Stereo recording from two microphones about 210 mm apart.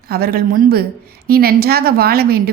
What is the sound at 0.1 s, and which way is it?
A woman's voice, 45° right (ahead or behind).